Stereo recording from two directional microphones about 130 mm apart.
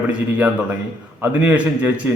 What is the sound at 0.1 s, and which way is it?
A man's voice, 10° right (ahead or behind).